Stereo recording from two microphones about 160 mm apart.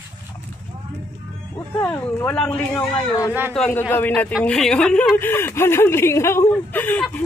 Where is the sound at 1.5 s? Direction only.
10° left (ahead or behind).